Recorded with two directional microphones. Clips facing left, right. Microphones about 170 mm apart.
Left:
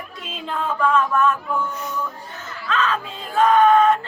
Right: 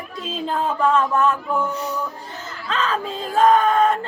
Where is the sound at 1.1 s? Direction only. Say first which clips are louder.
Right 1 dB; 30° right (ahead or behind).